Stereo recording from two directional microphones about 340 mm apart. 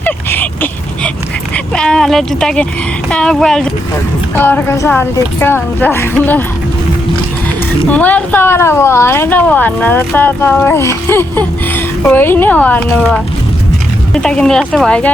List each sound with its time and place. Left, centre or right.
0.0 s a sound: centre
1.5 s dog: centre
3.1 s a woman's voice: centre
7.9 s speech: centre